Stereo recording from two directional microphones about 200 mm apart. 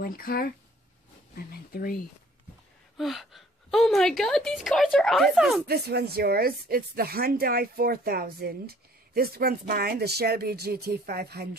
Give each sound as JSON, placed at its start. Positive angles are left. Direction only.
{"t": 0.0, "sound": "speech", "side_deg": 50}
{"t": 3.0, "sound": "a woman's voice", "side_deg": 0}
{"t": 5.7, "sound": "speech", "side_deg": -50}